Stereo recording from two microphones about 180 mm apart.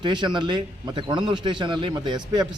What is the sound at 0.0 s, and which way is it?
A man's voice, 25° right (ahead or behind).